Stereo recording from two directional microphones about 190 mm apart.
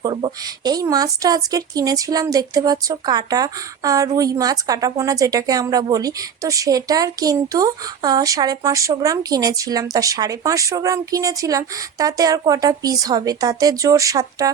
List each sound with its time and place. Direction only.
0.0 s a woman's voice: 25° right (ahead or behind)